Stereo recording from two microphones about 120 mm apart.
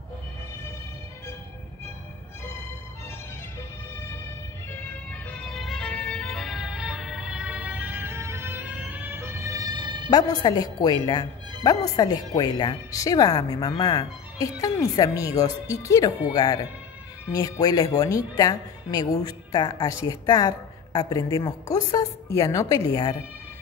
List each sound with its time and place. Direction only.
5.1 s music: 5° left (ahead or behind); by 10.0 s 40° right (ahead or behind)
10.1 s a woman's voice: 30° left (ahead or behind)